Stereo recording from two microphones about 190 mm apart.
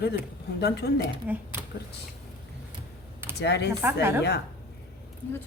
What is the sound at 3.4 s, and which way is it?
Speech, 60° left (ahead or behind).